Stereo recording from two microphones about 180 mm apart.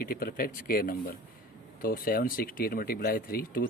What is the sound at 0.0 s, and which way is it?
A man's voice, 55° left (ahead or behind).